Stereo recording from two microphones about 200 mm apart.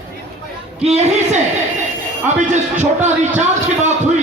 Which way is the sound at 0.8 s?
35° right (ahead or behind).